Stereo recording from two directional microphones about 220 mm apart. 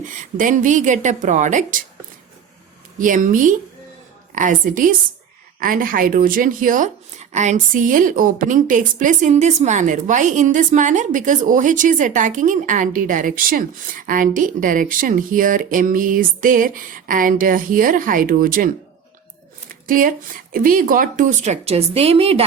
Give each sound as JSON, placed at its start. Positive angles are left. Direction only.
{"t": 0.3, "sound": "a woman's voice", "side_deg": -35}
{"t": 3.0, "sound": "a woman's voice", "side_deg": -35}
{"t": 19.9, "sound": "a woman's voice", "side_deg": -40}